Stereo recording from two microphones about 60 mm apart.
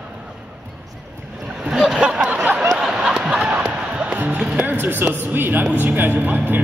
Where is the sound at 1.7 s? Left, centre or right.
Centre.